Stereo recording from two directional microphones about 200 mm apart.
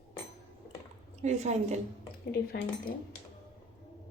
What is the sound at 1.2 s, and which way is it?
Speech, 35° right (ahead or behind).